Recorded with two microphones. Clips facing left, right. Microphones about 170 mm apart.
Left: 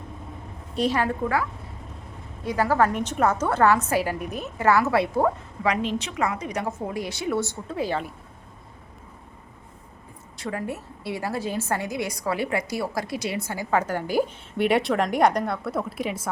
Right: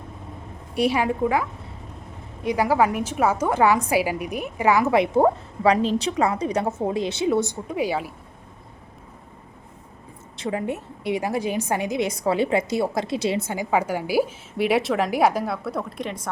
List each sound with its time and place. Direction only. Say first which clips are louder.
0.7 s a woman's voice: right 2 dB; 10° right (ahead or behind)
10.3 s a woman's voice: right 4 dB; 20° right (ahead or behind); by 16.3 s 5° left (ahead or behind)